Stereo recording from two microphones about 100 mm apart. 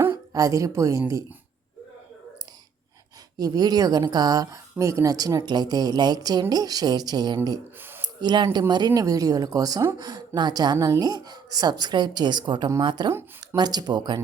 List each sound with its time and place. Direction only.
0.3 s speech: 35° right (ahead or behind)
3.3 s speech: 40° right (ahead or behind)
8.0 s a sound: 45° right (ahead or behind)
9.0 s a woman's voice: 35° right (ahead or behind)